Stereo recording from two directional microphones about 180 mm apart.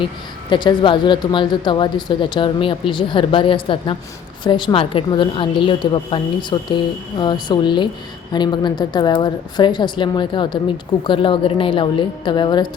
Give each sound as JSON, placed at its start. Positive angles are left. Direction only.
{"t": 0.5, "sound": "speech", "side_deg": 25}